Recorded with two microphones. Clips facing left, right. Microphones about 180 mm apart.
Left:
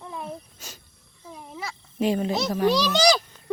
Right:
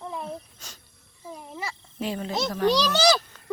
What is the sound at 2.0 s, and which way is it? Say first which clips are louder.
A child's voice: left 5 dB; 15° left (ahead or behind).